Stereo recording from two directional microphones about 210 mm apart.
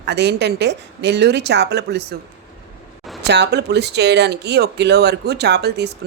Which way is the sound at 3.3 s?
55° right (ahead or behind).